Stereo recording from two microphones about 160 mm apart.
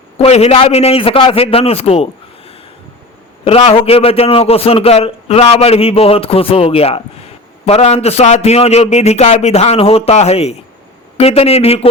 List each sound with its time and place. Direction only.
0.2 s a man's voice: 40° left (ahead or behind)
3.4 s a man's voice: 35° left (ahead or behind)